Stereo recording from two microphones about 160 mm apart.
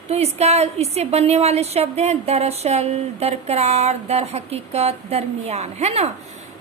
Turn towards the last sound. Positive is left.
turn(degrees=-40)  # may be behind; listen again after turning